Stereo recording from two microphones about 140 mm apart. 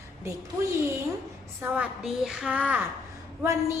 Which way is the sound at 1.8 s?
5° right (ahead or behind).